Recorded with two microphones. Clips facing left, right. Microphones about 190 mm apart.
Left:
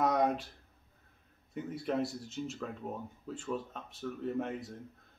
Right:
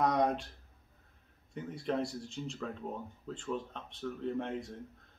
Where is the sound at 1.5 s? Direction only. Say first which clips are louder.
Left 1 dB; 5° left (ahead or behind).